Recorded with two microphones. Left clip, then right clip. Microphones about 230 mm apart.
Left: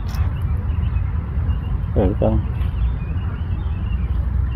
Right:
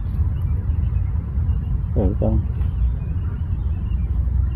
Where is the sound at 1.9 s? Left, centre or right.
Centre.